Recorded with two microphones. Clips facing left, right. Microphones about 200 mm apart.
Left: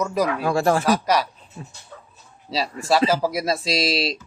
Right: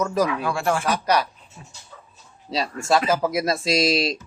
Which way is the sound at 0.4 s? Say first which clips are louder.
Left 4 dB; 35° left (ahead or behind).